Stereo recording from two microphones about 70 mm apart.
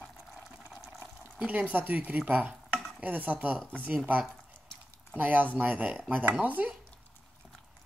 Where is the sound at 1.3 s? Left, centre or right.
Right.